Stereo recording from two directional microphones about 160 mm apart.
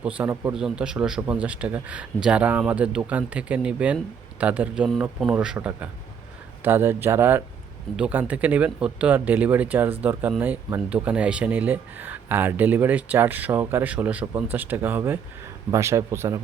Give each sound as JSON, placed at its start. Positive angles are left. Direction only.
{"t": 0.0, "sound": "speech", "side_deg": -10}